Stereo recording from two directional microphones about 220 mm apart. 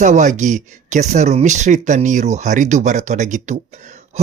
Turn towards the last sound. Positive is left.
turn(degrees=-30)  # may be behind; listen again after turning